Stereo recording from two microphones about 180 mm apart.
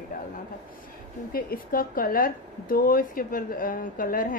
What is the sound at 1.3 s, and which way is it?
Speech, 55° left (ahead or behind).